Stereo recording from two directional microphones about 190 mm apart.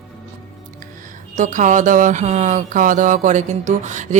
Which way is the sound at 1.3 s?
40° right (ahead or behind).